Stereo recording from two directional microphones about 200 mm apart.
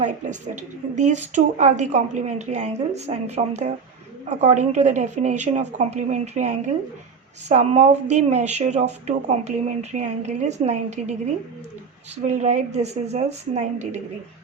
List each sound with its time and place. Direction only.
0.0 s speech: 35° right (ahead or behind)
12.2 s speech: 35° right (ahead or behind)